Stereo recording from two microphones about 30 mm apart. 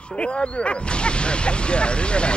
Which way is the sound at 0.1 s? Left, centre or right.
Left.